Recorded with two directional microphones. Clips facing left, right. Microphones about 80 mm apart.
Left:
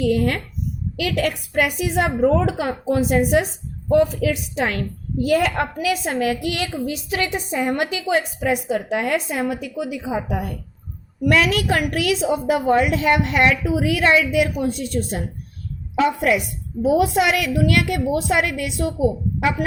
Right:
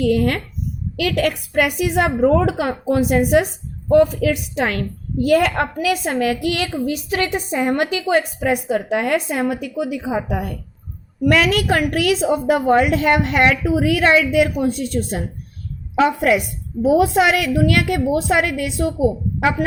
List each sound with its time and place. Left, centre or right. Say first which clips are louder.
0.0 s a woman's voice: right 2 dB; right
11.2 s a woman's voice: right 2 dB; right